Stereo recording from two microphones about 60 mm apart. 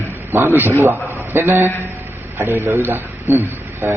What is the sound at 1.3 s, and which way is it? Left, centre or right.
Speech, right.